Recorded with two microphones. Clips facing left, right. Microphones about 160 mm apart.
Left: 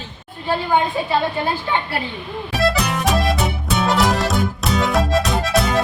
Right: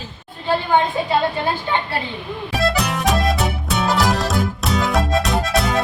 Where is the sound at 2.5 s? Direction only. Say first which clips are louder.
Left 1 dB; centre (ahead or behind).